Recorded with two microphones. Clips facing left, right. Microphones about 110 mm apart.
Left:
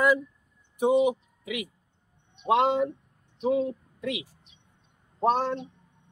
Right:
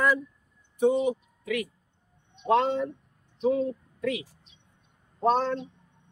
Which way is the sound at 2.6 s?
65° left (ahead or behind).